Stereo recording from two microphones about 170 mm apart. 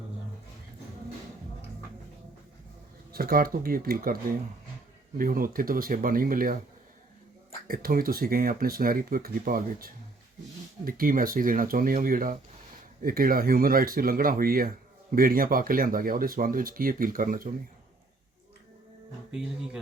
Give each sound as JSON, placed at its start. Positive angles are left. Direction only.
{"t": 3.1, "sound": "speech", "side_deg": -60}
{"t": 7.7, "sound": "speech", "side_deg": -60}
{"t": 19.3, "sound": "speech", "side_deg": -5}